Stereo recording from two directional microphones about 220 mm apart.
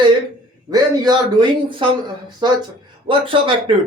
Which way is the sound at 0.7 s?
20° right (ahead or behind).